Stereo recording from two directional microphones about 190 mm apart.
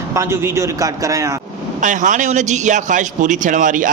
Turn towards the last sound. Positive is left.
turn(degrees=-45)  # may be behind; listen again after turning